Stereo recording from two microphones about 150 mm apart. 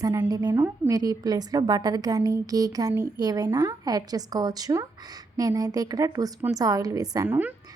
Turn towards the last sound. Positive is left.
turn(degrees=-10)  # may be behind; listen again after turning